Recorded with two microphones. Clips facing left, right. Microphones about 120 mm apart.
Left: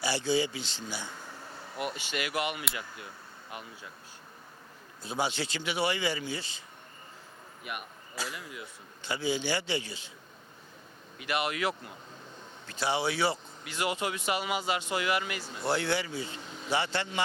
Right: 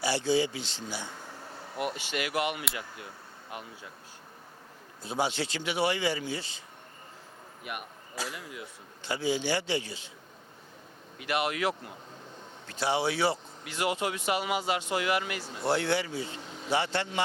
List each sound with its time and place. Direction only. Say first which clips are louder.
0.0 s speech: right 2 dB; 55° right (ahead or behind)
1.0 s air conditioning: right 1 dB; 35° right (ahead or behind)
1.8 s speech: right 2 dB; 55° right (ahead or behind)
5.0 s speech: right 2 dB; 55° right (ahead or behind)
8.1 s speech: right 1 dB; 50° right (ahead or behind)
11.2 s speech: right 2 dB; 55° right (ahead or behind)
12.8 s speech: right 1 dB; 55° right (ahead or behind)
16.0 s speech: right 1 dB; 45° right (ahead or behind)
16.7 s speech: right 2 dB; 60° right (ahead or behind)